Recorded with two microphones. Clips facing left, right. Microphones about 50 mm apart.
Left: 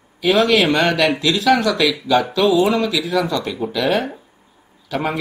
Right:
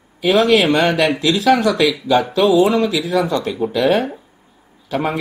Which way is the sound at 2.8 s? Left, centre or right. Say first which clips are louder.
Right 2 dB; centre.